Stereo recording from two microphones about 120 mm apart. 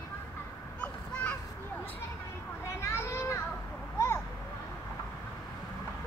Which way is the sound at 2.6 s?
20° left (ahead or behind).